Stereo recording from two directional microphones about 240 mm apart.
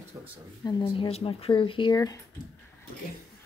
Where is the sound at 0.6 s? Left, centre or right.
Centre.